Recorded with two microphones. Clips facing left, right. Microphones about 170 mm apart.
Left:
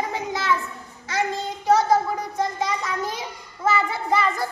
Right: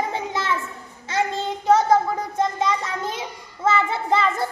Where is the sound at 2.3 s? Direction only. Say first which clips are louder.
Right 4 dB; 25° right (ahead or behind).